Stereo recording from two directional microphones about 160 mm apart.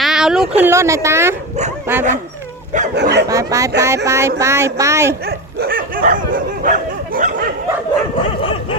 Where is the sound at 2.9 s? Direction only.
90° right.